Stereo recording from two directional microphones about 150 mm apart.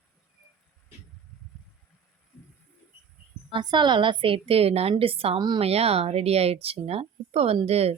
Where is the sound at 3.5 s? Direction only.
30° right (ahead or behind).